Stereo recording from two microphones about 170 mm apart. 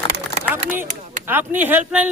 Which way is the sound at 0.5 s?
10° right (ahead or behind).